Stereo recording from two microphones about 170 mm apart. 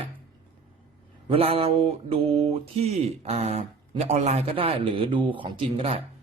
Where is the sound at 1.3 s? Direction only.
35° right (ahead or behind).